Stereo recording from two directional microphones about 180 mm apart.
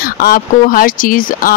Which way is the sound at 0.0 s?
55° left (ahead or behind).